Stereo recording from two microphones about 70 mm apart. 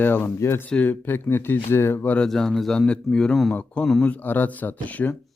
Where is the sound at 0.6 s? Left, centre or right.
Centre.